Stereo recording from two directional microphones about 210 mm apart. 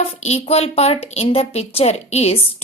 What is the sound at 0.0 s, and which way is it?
A woman's voice, 30° left (ahead or behind).